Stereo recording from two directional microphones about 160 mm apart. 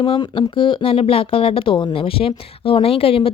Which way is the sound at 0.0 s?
30° left (ahead or behind).